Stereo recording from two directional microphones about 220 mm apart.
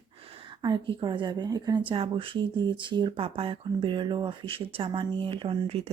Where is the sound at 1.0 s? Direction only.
20° right (ahead or behind).